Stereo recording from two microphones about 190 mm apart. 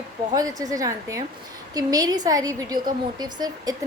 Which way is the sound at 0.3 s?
20° right (ahead or behind).